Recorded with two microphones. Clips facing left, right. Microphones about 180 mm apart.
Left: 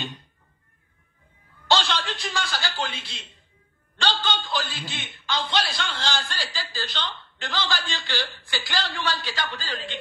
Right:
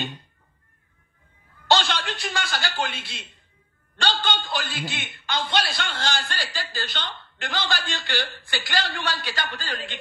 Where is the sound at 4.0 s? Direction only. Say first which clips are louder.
Right 1 dB; 55° right (ahead or behind).